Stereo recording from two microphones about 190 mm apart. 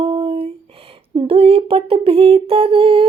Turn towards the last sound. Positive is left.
turn(degrees=-30)  # may be behind; listen again after turning